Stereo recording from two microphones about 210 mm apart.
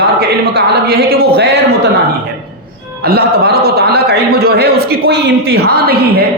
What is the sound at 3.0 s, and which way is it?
A man's voice, 45° right (ahead or behind).